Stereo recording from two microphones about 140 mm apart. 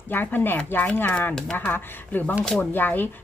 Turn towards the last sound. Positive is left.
turn(degrees=15)  # may be behind; listen again after turning